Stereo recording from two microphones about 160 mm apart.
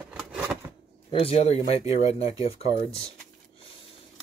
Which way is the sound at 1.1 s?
35° left (ahead or behind).